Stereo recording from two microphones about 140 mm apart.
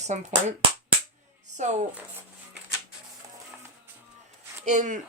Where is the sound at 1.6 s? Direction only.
60° right (ahead or behind).